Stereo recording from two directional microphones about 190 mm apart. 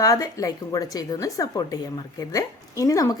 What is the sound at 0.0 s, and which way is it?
A woman's voice, 15° left (ahead or behind).